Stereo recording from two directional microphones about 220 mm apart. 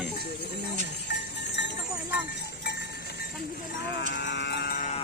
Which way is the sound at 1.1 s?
50° left (ahead or behind).